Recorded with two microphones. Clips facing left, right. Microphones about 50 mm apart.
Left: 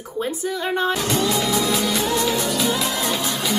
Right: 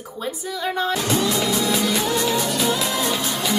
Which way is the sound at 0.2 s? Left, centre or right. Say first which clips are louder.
Left 3 dB; left.